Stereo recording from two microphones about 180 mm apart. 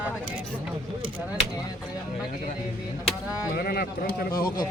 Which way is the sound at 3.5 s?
60° left (ahead or behind).